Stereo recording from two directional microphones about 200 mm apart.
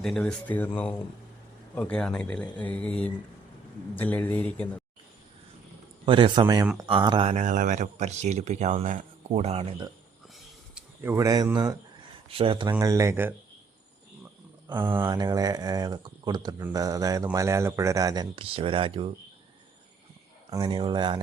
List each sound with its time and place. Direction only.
0.0 s speech: centre (ahead or behind)
1.7 s speech: 5° left (ahead or behind)
6.1 s speech: 25° right (ahead or behind)
10.8 s speech: 10° right (ahead or behind)
14.8 s speech: 10° right (ahead or behind); by 19.1 s 25° right (ahead or behind)
20.5 s speech: 20° right (ahead or behind)